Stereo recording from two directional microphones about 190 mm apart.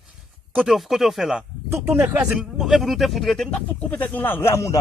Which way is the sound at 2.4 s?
Centre (ahead or behind).